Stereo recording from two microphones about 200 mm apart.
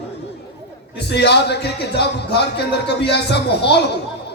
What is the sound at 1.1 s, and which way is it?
A man's voice, 55° left (ahead or behind).